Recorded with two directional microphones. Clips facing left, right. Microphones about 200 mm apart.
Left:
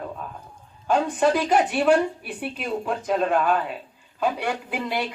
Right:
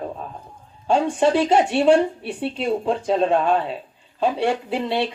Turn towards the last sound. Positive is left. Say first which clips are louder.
# right 5 dB
turn(degrees=-30)  # may be behind; listen again after turning